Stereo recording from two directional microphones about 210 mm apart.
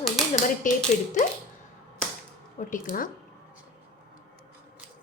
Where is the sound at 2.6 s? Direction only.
40° left (ahead or behind).